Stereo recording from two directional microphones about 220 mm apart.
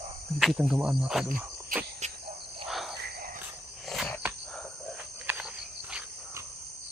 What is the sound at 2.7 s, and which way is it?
Cricket, centre (ahead or behind).